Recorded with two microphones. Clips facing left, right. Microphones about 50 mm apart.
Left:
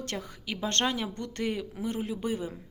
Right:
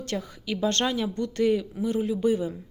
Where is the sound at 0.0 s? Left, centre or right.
Left.